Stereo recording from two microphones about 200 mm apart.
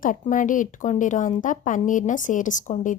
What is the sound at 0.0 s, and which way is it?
Speech, 40° left (ahead or behind).